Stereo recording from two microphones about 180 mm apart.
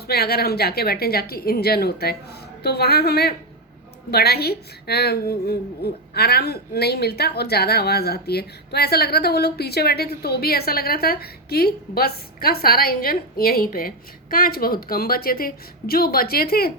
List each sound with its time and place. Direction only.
0.1 s a woman's voice: 60° left (ahead or behind)